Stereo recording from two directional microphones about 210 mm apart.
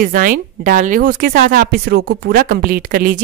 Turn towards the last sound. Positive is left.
turn(degrees=-45)  # may be behind; listen again after turning